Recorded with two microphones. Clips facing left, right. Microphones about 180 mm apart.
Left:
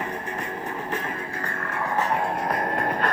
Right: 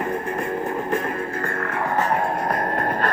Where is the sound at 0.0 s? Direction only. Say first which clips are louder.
Right 6 dB; 50° right (ahead or behind).